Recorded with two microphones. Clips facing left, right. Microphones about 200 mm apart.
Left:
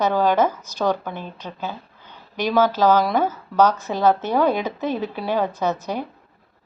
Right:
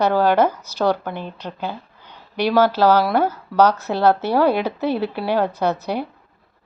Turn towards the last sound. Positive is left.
turn(degrees=-10)  # may be behind; listen again after turning